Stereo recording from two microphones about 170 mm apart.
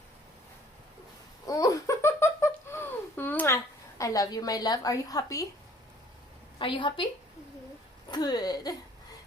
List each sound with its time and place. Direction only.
1.5 s giggle: 20° left (ahead or behind)
6.6 s a woman's voice: 30° left (ahead or behind)
8.1 s speech: 20° left (ahead or behind)